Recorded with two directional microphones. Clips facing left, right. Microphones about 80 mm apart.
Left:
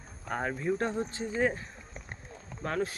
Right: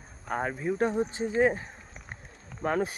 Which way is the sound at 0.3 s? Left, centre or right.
Centre.